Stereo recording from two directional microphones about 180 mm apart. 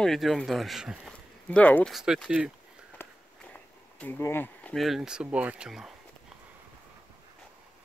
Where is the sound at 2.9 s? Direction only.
5° left (ahead or behind).